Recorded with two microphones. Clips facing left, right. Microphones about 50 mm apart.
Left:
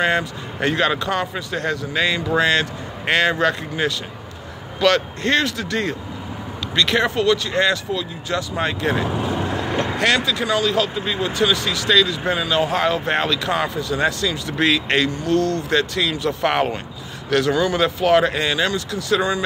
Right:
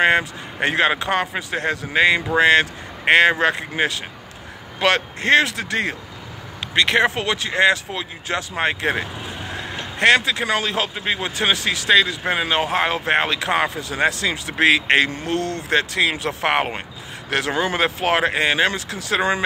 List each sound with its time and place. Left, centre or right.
0.0 s speech: right
15.3 s speech: left
15.7 s speech: right
16.3 s speech: right